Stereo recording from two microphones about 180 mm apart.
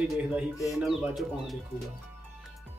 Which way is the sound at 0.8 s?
Centre (ahead or behind).